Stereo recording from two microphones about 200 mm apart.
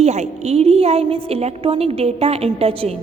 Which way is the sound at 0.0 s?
35° right (ahead or behind).